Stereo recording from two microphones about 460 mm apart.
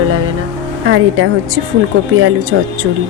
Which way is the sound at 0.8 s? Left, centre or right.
Right.